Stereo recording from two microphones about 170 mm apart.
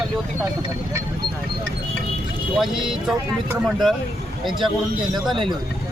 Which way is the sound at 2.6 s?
5° right (ahead or behind).